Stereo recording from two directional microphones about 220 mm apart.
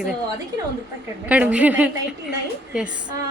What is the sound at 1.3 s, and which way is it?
Speech, 5° right (ahead or behind).